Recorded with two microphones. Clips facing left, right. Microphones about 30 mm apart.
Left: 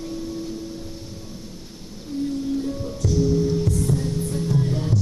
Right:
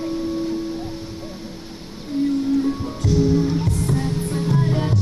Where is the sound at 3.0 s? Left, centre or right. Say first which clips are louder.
Right 2 dB; right.